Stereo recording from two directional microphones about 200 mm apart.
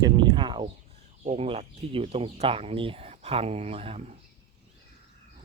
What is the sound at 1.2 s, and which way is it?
Speech, 35° right (ahead or behind).